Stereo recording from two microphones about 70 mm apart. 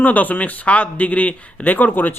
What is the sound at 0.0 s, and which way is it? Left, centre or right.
Speech, left.